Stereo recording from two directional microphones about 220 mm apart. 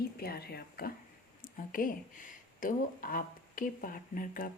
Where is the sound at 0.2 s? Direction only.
45° left (ahead or behind).